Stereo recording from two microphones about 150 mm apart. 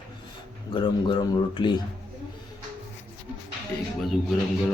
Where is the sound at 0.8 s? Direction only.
30° left (ahead or behind).